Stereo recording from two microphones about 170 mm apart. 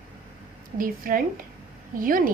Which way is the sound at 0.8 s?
55° right (ahead or behind).